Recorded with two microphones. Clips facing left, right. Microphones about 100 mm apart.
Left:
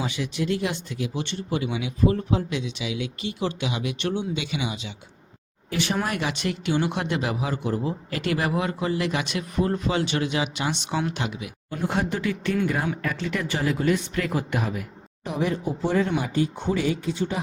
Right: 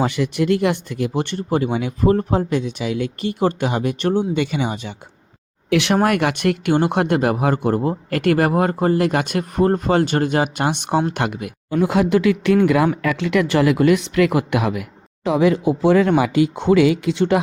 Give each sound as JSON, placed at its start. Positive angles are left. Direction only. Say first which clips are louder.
{"t": 0.0, "sound": "speech", "louder": "right 8 dB", "side_deg": -60}
{"t": 5.7, "sound": "speech", "louder": "right 10 dB", "side_deg": -70}
{"t": 11.7, "sound": "speech", "louder": "right 10 dB", "side_deg": -90}